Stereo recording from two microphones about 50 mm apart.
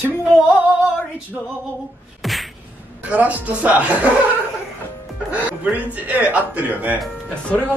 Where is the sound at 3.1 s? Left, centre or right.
Right.